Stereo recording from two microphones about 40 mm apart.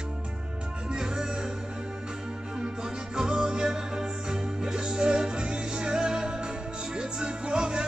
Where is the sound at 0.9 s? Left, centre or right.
Centre.